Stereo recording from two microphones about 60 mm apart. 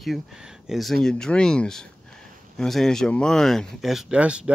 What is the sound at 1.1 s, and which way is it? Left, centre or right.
Speech, centre.